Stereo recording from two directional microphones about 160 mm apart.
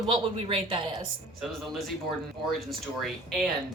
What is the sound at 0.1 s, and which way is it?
Speech, 35° right (ahead or behind).